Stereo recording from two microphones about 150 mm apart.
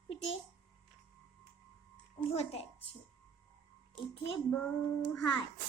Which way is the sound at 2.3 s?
45° left (ahead or behind).